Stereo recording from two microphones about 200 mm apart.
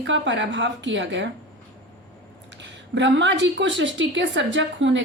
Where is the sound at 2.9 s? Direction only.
65° right (ahead or behind).